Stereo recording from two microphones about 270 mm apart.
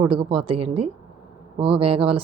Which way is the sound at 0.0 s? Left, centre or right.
Centre.